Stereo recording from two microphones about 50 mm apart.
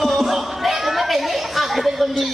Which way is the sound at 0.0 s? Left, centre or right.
Centre.